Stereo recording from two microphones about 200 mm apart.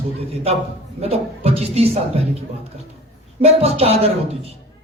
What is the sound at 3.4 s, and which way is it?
A woman's voice, 30° right (ahead or behind).